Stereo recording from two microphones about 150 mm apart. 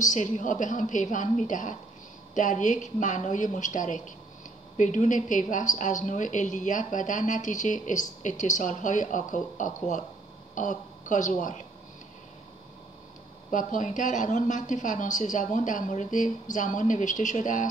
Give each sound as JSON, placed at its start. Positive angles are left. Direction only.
{"t": 0.0, "sound": "a woman's voice", "side_deg": 55}
{"t": 13.5, "sound": "a woman's voice", "side_deg": 60}